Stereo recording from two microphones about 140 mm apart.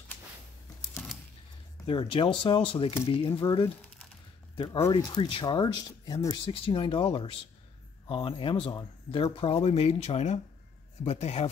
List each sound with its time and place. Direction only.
1.9 s speech: 40° left (ahead or behind)
4.9 s speech: 35° left (ahead or behind)
6.4 s speech: 40° left (ahead or behind)